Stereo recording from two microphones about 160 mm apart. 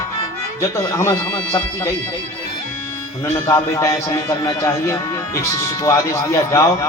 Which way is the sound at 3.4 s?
20° left (ahead or behind).